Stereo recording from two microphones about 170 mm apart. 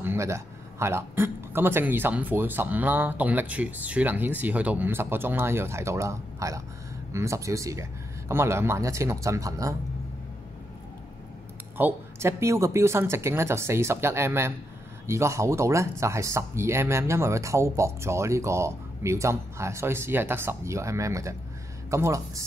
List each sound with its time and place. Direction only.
0.0 s speech: 15° right (ahead or behind)
11.7 s speech: 15° right (ahead or behind)